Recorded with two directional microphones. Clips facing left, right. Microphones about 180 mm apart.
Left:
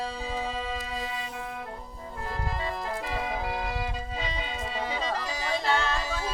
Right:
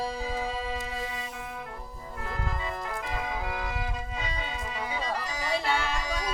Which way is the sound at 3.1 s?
30° left (ahead or behind).